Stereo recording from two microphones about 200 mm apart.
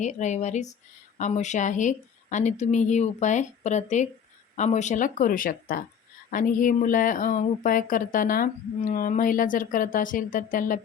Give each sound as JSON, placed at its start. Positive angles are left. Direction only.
{"t": 0.0, "sound": "a woman's voice", "side_deg": 35}